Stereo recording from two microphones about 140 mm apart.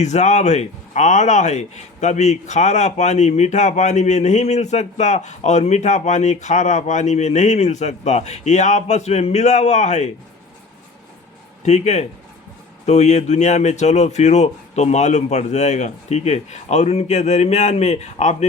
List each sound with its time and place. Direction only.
0.0 s speech: 55° left (ahead or behind)
11.6 s speech: 55° left (ahead or behind)